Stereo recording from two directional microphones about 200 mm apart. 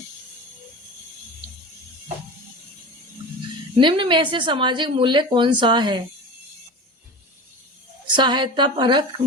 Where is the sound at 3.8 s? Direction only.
25° right (ahead or behind).